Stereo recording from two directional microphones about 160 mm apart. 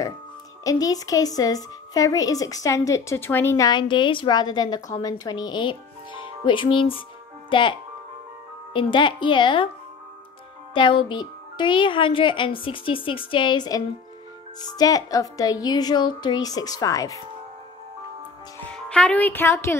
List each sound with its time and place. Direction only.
0.7 s a woman's voice: 20° left (ahead or behind)
8.7 s speech: 30° left (ahead or behind)
10.7 s a woman's voice: 30° left (ahead or behind)
18.7 s speech: 5° left (ahead or behind)